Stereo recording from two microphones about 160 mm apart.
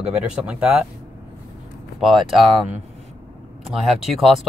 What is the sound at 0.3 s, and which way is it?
Speech, 5° right (ahead or behind).